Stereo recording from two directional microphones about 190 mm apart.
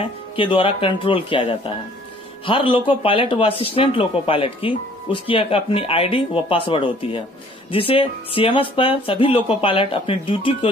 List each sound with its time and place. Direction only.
0.4 s speech: 30° left (ahead or behind)